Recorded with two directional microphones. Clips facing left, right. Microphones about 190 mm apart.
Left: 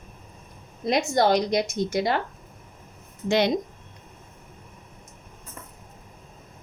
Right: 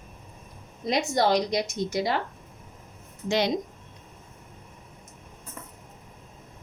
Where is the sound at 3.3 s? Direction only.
60° left (ahead or behind).